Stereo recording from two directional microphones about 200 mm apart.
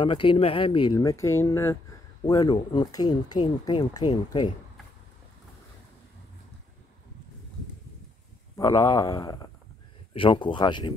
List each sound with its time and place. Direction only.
0.0 s speech: 25° left (ahead or behind)
8.5 s speech: 15° left (ahead or behind)